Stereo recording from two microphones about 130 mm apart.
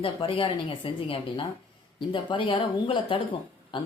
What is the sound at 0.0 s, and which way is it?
A woman's voice, 45° left (ahead or behind).